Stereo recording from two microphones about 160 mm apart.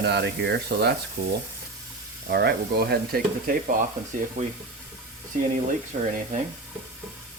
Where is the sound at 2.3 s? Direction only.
90° right; by 3.7 s 65° right (ahead or behind).